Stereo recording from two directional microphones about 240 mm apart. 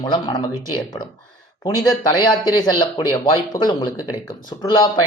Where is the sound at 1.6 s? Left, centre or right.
Centre.